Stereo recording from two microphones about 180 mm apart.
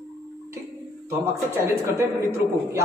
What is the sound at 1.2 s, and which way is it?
A man's voice, 15° right (ahead or behind).